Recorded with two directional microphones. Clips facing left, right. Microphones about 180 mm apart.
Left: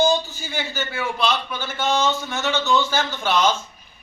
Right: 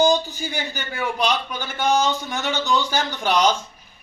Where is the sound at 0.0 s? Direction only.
15° right (ahead or behind).